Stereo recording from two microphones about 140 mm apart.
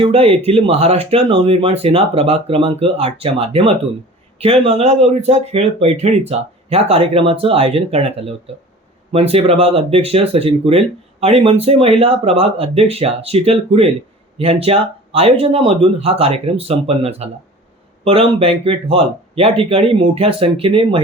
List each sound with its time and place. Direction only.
0.0 s speech: 45° right (ahead or behind)